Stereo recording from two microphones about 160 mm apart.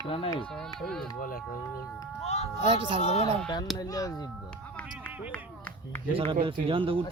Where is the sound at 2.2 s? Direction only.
40° left (ahead or behind).